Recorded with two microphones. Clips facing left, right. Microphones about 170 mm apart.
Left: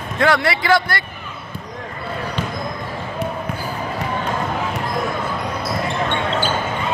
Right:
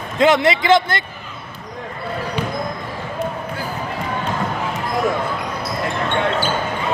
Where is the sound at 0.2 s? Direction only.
20° right (ahead or behind).